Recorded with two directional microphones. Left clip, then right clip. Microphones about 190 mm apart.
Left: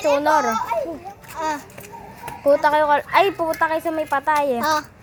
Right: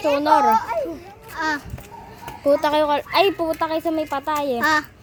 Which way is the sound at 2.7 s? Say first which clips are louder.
Left 2 dB; 25° right (ahead or behind).